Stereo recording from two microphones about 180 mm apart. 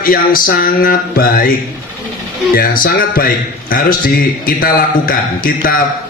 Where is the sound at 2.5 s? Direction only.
50° left (ahead or behind).